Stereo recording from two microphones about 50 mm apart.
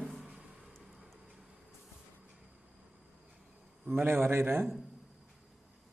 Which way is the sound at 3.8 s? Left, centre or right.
Right.